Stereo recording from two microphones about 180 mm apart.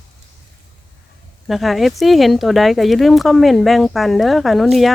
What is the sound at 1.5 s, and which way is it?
Speech, centre (ahead or behind).